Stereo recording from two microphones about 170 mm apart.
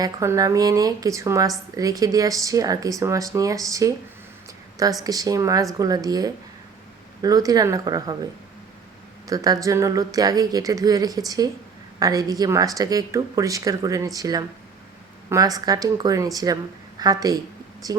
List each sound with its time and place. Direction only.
0.0 s speech: 20° right (ahead or behind)
5.0 s speech: 20° right (ahead or behind)
9.2 s speech: 20° right (ahead or behind)